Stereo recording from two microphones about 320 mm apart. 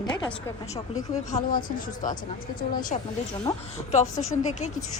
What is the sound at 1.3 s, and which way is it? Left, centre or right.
Speech, left.